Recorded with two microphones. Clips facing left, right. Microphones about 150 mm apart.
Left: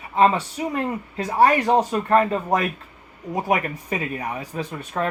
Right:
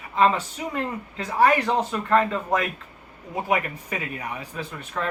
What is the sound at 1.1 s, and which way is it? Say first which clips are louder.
Speech: left 2 dB; 35° left (ahead or behind).